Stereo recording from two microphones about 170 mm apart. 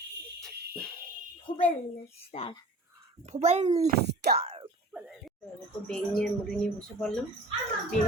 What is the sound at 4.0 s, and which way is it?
Speech, 75° right (ahead or behind).